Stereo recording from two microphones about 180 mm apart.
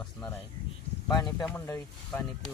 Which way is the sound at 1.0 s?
20° left (ahead or behind).